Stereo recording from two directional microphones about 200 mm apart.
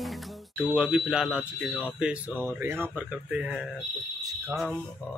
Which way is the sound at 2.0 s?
5° right (ahead or behind).